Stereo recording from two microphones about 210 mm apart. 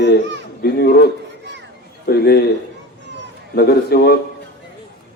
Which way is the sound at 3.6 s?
50° left (ahead or behind).